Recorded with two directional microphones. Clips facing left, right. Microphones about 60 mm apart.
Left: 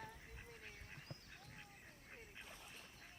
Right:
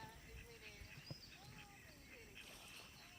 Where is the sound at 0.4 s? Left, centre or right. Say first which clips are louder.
Left 3 dB; left.